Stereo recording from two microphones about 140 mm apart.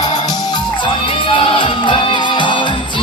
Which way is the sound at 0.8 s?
35° left (ahead or behind).